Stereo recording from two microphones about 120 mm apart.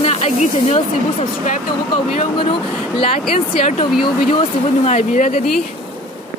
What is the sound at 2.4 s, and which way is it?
Speech, 50° left (ahead or behind).